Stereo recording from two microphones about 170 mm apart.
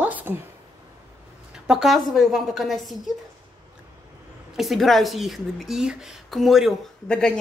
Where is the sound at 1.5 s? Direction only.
5° right (ahead or behind).